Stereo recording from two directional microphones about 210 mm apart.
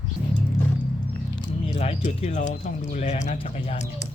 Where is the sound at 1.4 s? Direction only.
30° left (ahead or behind).